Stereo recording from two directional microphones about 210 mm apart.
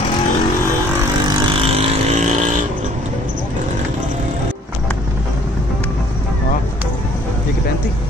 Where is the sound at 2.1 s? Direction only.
35° right (ahead or behind).